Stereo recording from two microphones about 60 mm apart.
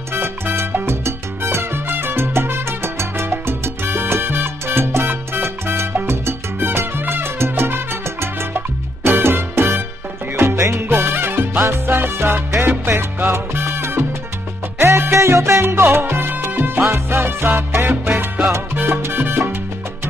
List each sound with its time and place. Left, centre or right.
0.1 s salsa music: right
14.8 s music: right
16.9 s salsa music: right